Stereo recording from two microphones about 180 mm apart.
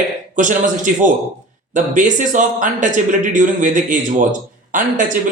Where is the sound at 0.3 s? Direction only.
45° right (ahead or behind).